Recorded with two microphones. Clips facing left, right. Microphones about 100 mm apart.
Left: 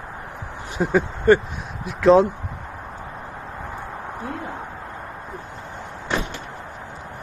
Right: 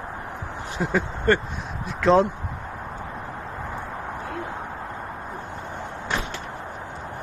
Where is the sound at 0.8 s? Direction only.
15° left (ahead or behind).